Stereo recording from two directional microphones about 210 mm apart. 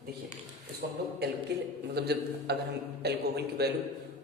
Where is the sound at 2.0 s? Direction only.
50° right (ahead or behind).